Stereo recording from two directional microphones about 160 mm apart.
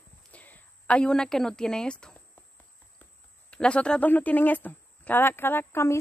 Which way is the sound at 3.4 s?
5° left (ahead or behind).